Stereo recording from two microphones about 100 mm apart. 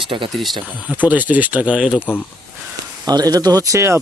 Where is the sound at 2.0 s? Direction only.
20° left (ahead or behind).